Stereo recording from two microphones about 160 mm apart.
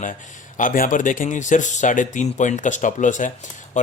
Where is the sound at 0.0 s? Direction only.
55° left (ahead or behind).